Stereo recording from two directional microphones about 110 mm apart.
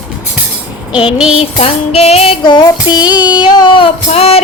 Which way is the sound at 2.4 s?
40° left (ahead or behind).